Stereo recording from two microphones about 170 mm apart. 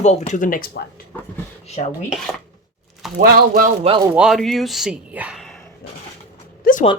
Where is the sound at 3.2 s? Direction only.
55° right (ahead or behind).